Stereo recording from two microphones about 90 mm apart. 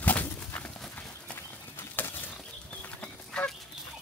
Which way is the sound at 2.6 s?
10° left (ahead or behind).